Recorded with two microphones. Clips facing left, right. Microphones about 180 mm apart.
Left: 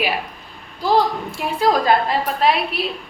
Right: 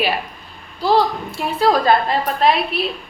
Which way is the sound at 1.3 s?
15° left (ahead or behind).